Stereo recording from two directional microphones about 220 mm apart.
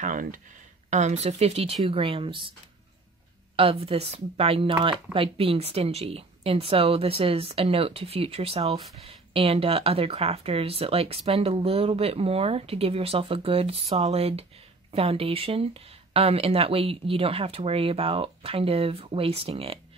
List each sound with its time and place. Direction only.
0.0 s a sound: 35° right (ahead or behind)
0.8 s speech: 30° right (ahead or behind)
3.5 s speech: 25° right (ahead or behind)